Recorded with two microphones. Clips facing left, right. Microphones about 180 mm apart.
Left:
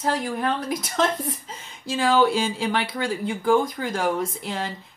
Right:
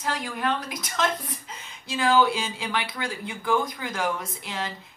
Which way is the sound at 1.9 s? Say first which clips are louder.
Left 2 dB; 50° left (ahead or behind).